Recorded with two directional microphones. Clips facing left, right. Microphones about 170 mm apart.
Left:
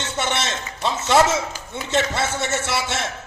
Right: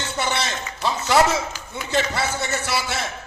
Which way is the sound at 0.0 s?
25° left (ahead or behind).